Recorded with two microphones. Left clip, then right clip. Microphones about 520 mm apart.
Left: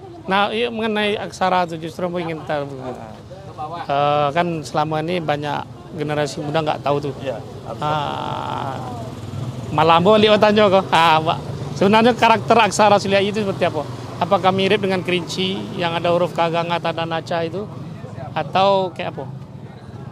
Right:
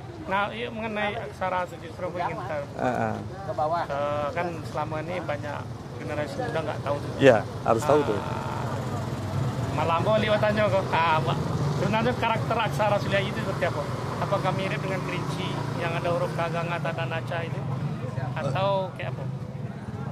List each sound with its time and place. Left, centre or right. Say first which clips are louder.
0.3 s speech: left 9 dB; left
3.9 s speech: left 11 dB; left
7.2 s speech: right 9 dB; right
9.8 s speech: left 11 dB; left